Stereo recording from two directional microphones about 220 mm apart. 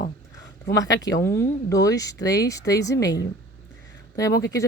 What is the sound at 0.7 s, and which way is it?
Speech, 15° left (ahead or behind).